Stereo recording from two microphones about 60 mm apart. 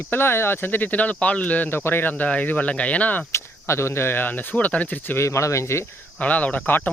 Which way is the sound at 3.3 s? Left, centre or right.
Left.